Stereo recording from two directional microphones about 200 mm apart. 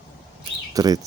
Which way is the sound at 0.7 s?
20° right (ahead or behind).